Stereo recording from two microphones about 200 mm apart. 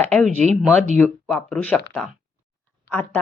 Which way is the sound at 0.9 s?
5° left (ahead or behind).